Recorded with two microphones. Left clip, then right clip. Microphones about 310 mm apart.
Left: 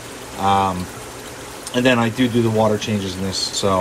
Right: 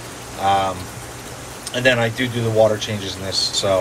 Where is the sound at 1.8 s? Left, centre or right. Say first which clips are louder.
Even; centre.